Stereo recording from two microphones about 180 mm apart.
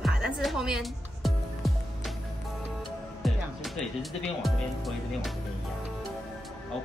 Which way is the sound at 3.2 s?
Centre (ahead or behind).